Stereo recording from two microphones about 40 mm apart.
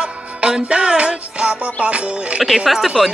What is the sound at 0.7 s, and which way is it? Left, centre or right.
Music, right.